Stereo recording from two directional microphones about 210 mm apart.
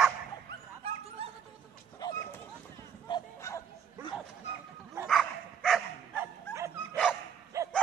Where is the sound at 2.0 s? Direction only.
20° left (ahead or behind).